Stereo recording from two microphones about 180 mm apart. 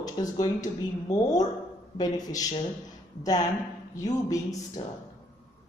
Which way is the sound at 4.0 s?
20° left (ahead or behind).